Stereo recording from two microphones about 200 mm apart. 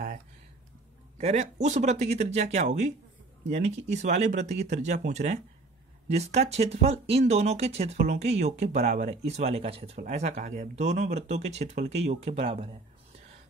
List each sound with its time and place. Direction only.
1.1 s speech: 35° right (ahead or behind)